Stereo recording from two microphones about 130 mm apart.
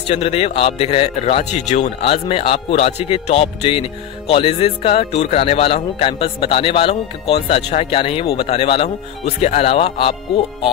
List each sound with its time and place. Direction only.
0.1 s speech: 50° left (ahead or behind)